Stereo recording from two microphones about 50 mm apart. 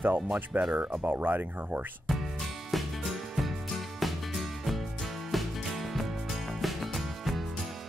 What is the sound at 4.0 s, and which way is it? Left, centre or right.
Music, centre.